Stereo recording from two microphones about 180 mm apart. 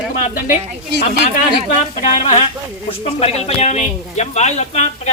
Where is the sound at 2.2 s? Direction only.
30° left (ahead or behind).